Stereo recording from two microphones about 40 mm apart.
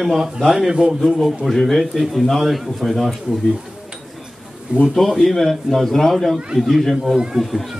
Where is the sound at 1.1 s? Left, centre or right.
Centre.